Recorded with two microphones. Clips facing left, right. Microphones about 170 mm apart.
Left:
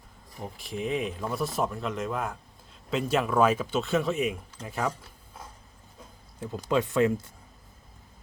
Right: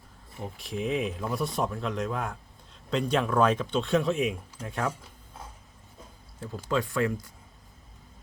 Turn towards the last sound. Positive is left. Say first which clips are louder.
# left 4 dB
turn(degrees=20)  # may be behind; listen again after turning